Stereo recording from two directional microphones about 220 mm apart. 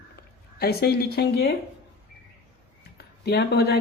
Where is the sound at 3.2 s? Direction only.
45° left (ahead or behind).